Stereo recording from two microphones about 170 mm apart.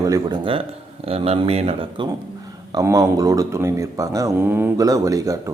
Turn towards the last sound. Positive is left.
turn(degrees=-20)  # may be behind; listen again after turning